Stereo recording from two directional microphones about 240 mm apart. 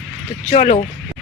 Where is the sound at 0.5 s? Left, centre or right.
Left.